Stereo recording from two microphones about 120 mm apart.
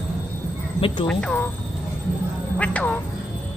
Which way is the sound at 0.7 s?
45° left (ahead or behind).